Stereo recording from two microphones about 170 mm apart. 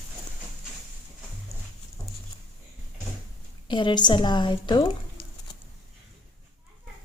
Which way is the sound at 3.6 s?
25° left (ahead or behind).